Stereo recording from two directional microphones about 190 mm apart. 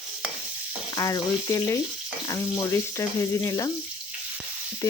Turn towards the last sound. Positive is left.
turn(degrees=15)  # may be behind; listen again after turning